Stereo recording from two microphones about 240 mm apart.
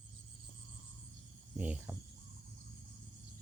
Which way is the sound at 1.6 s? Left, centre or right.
Centre.